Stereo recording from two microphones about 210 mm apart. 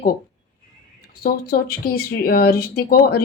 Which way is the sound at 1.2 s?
45° left (ahead or behind).